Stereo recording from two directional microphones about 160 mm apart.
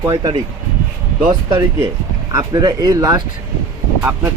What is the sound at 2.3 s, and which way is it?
Speech, 25° right (ahead or behind).